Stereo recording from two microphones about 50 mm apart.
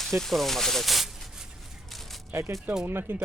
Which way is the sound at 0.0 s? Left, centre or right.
Centre.